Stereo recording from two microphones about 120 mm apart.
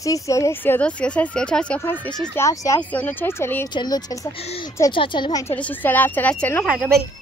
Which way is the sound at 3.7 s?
35° left (ahead or behind).